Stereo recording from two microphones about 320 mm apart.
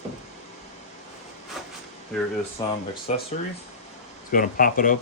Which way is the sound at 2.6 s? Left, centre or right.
Centre.